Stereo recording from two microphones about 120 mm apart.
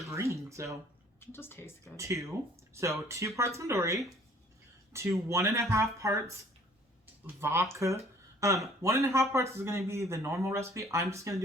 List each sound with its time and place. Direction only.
0.0 s speech: 25° right (ahead or behind)
1.2 s a woman's voice: 20° left (ahead or behind)
2.0 s speech: 25° right (ahead or behind)
7.3 s speech: 20° right (ahead or behind)